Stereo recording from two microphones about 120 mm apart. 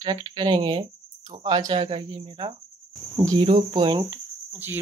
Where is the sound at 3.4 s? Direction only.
50° right (ahead or behind).